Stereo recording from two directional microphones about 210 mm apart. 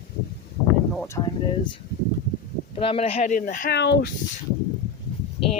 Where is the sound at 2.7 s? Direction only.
25° left (ahead or behind).